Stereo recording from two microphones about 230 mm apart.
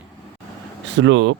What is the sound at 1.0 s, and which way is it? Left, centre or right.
Speech, right.